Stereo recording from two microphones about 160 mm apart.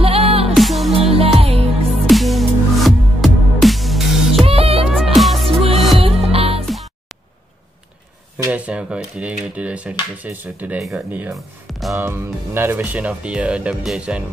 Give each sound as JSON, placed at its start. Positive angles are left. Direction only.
{"t": 0.0, "sound": "music", "side_deg": -35}
{"t": 0.6, "sound": "music", "side_deg": 0}
{"t": 0.9, "sound": "music", "side_deg": -40}
{"t": 2.0, "sound": "music", "side_deg": 0}
{"t": 4.5, "sound": "music", "side_deg": -40}
{"t": 4.8, "sound": "music", "side_deg": 0}
{"t": 5.6, "sound": "music", "side_deg": -40}
{"t": 6.6, "sound": "music", "side_deg": 0}
{"t": 8.5, "sound": "speech", "side_deg": -10}
{"t": 11.9, "sound": "speech", "side_deg": -15}